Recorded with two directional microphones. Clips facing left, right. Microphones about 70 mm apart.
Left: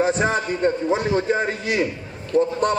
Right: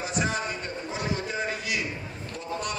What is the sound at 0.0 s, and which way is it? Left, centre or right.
A man's voice, left.